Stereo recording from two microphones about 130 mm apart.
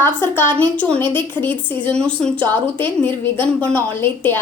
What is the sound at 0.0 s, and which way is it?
A woman's voice, 20° left (ahead or behind).